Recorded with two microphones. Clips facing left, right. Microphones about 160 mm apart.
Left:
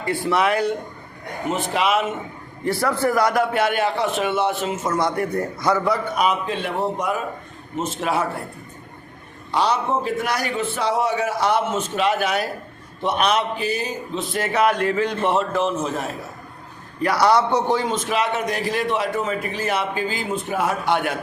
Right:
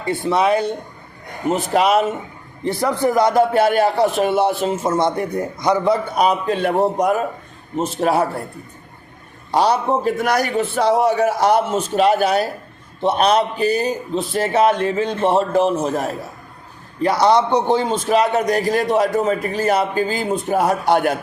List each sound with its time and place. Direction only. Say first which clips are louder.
0.0 s a man's voice: right 3 dB; 20° right (ahead or behind)
1.5 s a man's voice: right 5 dB; 40° right (ahead or behind)
2.6 s a man's voice: right 2 dB; 20° right (ahead or behind)
6.1 s a man's voice: right 4 dB; 40° right (ahead or behind)
9.5 s a man's voice: right 4 dB; 40° right (ahead or behind)
17.0 s a man's voice: right 3 dB; 25° right (ahead or behind); by 21.2 s 40° right (ahead or behind)